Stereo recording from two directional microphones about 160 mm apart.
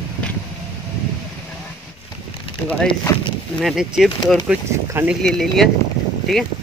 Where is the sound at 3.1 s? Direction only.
20° left (ahead or behind).